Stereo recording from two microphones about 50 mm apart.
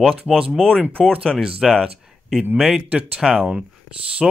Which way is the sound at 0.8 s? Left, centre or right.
Centre.